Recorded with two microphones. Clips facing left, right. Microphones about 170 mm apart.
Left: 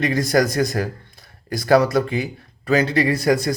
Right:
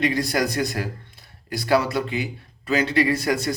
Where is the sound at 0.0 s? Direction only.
45° left (ahead or behind).